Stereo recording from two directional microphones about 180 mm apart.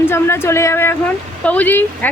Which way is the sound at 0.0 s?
15° left (ahead or behind).